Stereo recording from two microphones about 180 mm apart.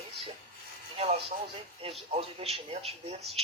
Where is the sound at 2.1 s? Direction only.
35° right (ahead or behind).